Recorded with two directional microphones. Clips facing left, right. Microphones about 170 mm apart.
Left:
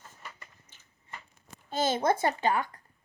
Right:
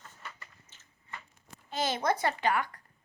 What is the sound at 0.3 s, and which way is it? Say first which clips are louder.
Biting: even; 15° left (ahead or behind).